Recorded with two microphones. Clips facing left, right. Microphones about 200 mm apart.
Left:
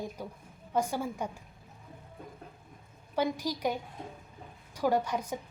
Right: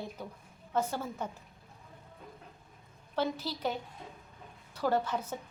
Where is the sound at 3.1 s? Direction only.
15° left (ahead or behind).